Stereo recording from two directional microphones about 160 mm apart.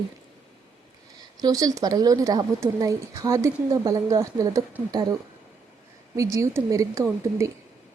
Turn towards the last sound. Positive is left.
turn(degrees=-20)  # may be behind; listen again after turning